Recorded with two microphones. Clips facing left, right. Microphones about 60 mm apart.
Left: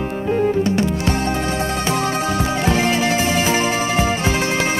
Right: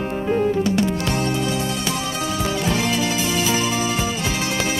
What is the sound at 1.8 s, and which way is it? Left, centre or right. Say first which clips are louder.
Music: left 5 dB; left.